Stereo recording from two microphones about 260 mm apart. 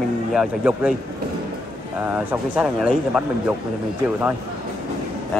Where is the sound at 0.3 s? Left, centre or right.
Centre.